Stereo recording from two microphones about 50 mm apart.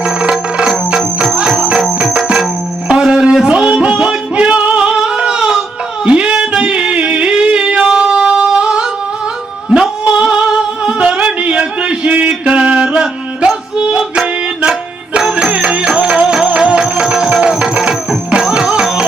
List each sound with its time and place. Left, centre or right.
0.0 s music: centre
0.9 s music: centre
2.1 s music: centre
4.8 s a sound: centre
6.1 s music: right
9.6 s carnatic music: centre
10.0 s music: right
17.5 s tabla: centre